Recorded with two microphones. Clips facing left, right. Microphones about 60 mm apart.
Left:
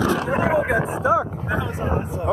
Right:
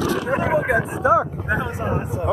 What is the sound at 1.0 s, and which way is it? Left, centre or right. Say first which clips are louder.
Vehicle: right 3 dB; right.